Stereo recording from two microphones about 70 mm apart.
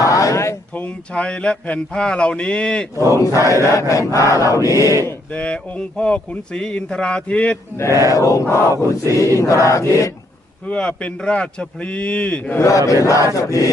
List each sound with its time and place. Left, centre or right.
0.0 s a sound: left
0.8 s speech: centre
3.1 s chant: left
5.3 s speech: centre
7.9 s chant: left
10.7 s speech: centre
12.5 s chant: left